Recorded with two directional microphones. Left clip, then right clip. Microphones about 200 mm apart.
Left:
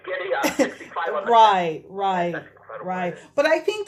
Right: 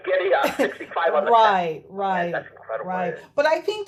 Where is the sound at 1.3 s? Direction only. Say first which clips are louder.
Left 4 dB; 15° left (ahead or behind).